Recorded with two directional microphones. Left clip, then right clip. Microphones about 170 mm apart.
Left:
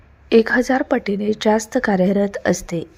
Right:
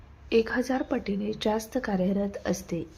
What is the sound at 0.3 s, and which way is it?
A woman's voice, 40° left (ahead or behind).